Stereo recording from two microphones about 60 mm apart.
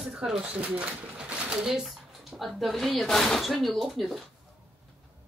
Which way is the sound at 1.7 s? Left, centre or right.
Centre.